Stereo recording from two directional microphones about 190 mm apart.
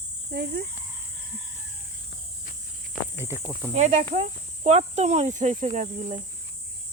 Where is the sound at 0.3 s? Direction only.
55° right (ahead or behind).